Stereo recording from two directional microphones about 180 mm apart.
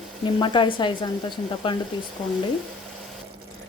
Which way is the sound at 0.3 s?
25° left (ahead or behind).